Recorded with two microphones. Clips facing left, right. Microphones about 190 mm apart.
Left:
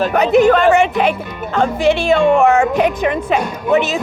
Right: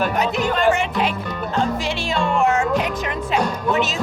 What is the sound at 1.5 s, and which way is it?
Music, 65° left (ahead or behind).